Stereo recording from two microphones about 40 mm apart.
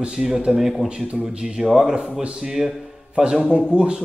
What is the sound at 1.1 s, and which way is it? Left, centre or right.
Speech, right.